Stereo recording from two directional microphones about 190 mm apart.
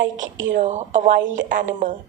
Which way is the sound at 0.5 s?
40° right (ahead or behind).